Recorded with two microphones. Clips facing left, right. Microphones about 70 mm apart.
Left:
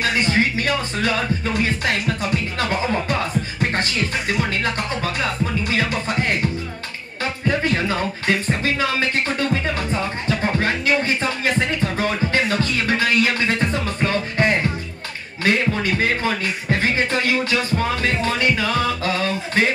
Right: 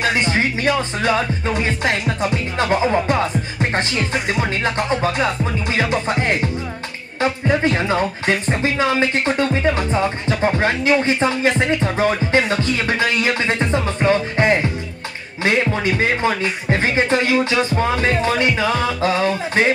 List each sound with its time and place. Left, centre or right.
0.0 s speech: right
4.3 s speech: right